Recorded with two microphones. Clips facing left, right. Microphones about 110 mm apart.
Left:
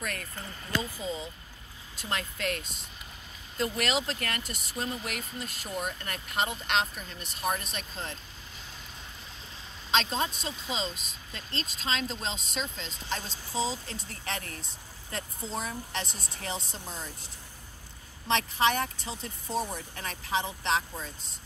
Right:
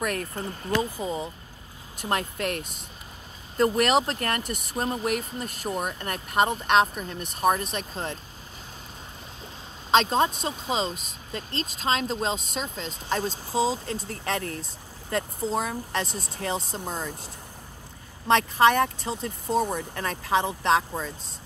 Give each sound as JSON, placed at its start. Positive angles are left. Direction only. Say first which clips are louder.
{"t": 0.0, "sound": "speech", "louder": "right 9 dB", "side_deg": -50}
{"t": 9.8, "sound": "speech", "louder": "right 8 dB", "side_deg": -50}